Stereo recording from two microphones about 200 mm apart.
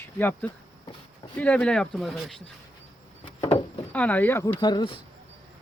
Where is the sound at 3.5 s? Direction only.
5° left (ahead or behind).